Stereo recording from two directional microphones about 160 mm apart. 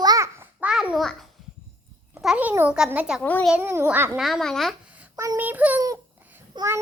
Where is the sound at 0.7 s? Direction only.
5° right (ahead or behind).